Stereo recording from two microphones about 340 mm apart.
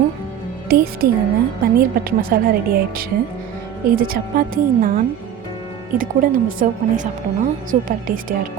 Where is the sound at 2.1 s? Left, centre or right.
Right.